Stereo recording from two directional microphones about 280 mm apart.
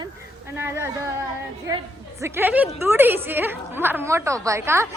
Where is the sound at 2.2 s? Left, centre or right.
Centre.